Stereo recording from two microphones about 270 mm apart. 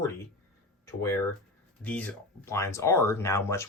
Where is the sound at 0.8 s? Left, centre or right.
Centre.